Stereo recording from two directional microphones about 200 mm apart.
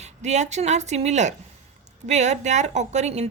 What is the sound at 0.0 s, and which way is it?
A woman's voice, 35° right (ahead or behind).